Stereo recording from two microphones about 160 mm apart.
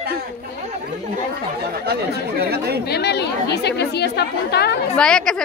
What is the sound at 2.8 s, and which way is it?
A woman's voice, 90° left.